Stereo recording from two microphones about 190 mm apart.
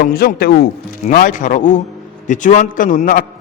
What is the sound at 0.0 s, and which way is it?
A man's voice, 50° left (ahead or behind).